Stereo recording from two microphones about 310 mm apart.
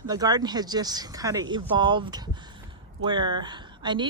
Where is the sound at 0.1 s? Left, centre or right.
Centre.